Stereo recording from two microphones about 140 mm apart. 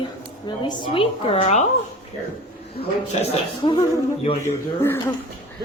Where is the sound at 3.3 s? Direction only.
40° left (ahead or behind).